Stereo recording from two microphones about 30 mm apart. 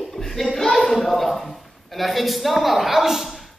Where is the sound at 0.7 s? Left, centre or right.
Centre.